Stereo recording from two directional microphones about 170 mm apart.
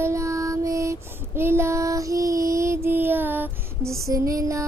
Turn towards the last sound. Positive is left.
turn(degrees=-20)  # may be behind; listen again after turning